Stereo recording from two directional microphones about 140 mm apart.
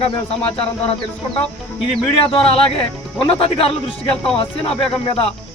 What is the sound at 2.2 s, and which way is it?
Speech, 40° left (ahead or behind).